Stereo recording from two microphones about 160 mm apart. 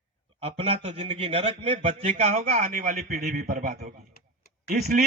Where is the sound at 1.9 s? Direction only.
55° right (ahead or behind).